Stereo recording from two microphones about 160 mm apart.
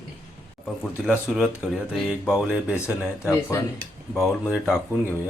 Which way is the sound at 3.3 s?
15° left (ahead or behind).